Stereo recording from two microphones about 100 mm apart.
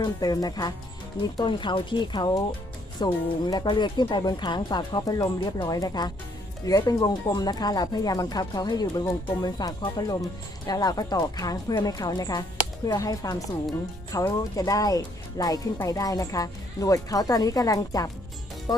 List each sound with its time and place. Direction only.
0.0 s speech: 40° left (ahead or behind)
18.7 s music: 40° left (ahead or behind)